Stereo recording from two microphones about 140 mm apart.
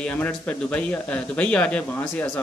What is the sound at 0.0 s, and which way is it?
Speech, 10° left (ahead or behind).